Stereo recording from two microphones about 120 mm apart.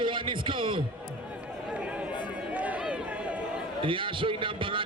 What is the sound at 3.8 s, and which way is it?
A man's voice, 45° right (ahead or behind).